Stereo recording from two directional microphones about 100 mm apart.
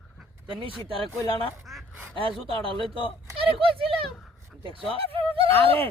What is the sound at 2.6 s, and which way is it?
Speech, 65° right (ahead or behind).